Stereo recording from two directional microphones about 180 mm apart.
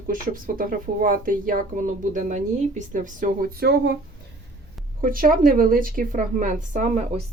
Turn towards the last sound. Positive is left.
turn(degrees=-45)  # may be behind; listen again after turning